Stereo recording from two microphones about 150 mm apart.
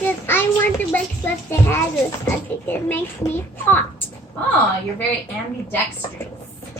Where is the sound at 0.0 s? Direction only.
15° left (ahead or behind).